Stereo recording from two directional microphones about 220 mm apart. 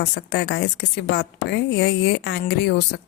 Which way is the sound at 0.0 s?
50° left (ahead or behind).